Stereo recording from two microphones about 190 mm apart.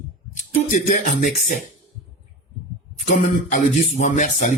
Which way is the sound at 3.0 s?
40° left (ahead or behind).